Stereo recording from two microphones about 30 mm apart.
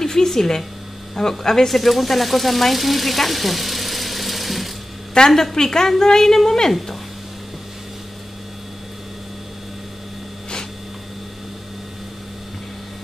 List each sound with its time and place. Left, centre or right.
0.0 s a woman's voice: centre
1.7 s speech: centre
5.3 s a woman's voice: centre